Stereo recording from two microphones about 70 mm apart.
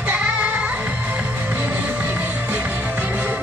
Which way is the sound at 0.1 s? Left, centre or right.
Centre.